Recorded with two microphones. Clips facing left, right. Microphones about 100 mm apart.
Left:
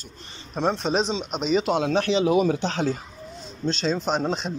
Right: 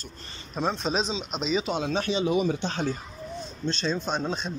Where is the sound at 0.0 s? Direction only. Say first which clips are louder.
Even; 20° left (ahead or behind).